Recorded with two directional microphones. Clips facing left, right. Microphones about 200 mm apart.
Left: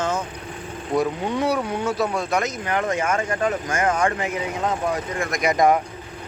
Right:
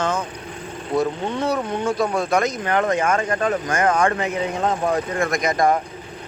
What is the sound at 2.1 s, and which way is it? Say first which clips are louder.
Speech: right 3 dB; 50° right (ahead or behind).